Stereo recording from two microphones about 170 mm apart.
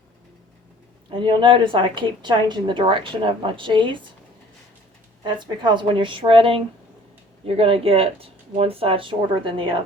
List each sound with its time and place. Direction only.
1.1 s a woman's voice: 30° right (ahead or behind)
5.2 s a woman's voice: 25° right (ahead or behind)